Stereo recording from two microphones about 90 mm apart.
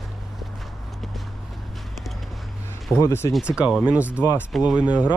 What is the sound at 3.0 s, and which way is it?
Speech, 30° left (ahead or behind).